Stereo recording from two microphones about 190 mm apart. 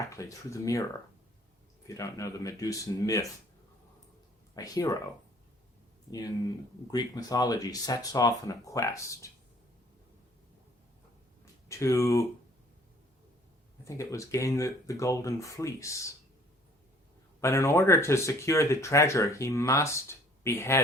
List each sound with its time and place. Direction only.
0.0 s speech: 15° left (ahead or behind)
1.9 s speech: 15° left (ahead or behind)
4.5 s speech: 20° left (ahead or behind)
6.1 s speech: 20° left (ahead or behind)
11.7 s speech: 15° left (ahead or behind)
13.8 s speech: 15° left (ahead or behind)
17.4 s speech: 15° left (ahead or behind)